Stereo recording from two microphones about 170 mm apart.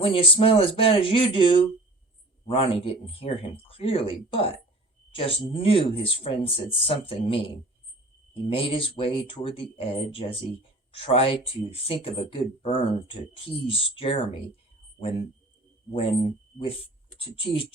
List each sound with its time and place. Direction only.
0.0 s speech: 30° left (ahead or behind)
16.6 s speech: 30° left (ahead or behind)